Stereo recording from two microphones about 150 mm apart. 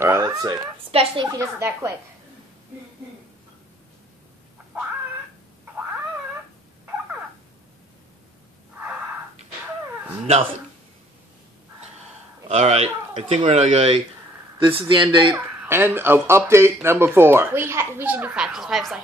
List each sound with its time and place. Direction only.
0.0 s a sound: 20° right (ahead or behind)
0.9 s speech: 35° right (ahead or behind)
1.4 s speech: 20° right (ahead or behind)
10.2 s speech: 40° right (ahead or behind)
12.4 s speech: 45° right (ahead or behind)
14.6 s speech: 35° right (ahead or behind)
15.3 s speech: 15° right (ahead or behind)